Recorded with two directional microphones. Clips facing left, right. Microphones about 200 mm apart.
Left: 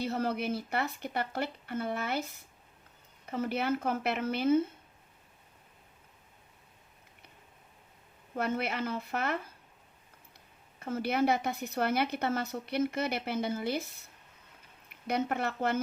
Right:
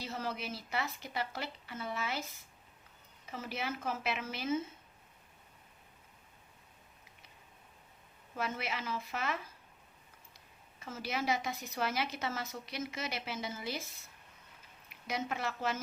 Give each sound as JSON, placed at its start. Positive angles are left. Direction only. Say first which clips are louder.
{"t": 0.0, "sound": "a woman's voice", "louder": "left 8 dB", "side_deg": 60}
{"t": 8.4, "sound": "a woman's voice", "louder": "left 6 dB", "side_deg": 60}
{"t": 10.8, "sound": "a woman's voice", "louder": "left 9 dB", "side_deg": 60}